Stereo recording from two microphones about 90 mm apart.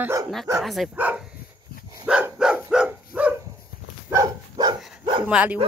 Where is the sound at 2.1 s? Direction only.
15° right (ahead or behind).